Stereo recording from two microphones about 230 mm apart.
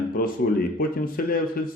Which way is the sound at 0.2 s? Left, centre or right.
Left.